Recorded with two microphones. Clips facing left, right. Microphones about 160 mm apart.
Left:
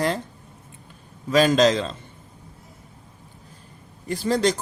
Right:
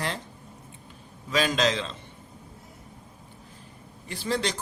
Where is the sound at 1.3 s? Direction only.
45° left (ahead or behind).